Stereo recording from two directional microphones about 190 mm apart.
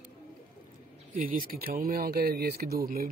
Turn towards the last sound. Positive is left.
turn(degrees=-50)  # may be behind; listen again after turning